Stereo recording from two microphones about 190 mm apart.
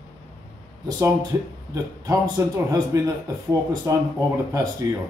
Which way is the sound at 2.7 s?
15° right (ahead or behind).